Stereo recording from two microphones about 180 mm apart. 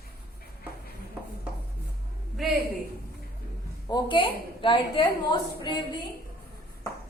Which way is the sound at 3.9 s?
30° left (ahead or behind).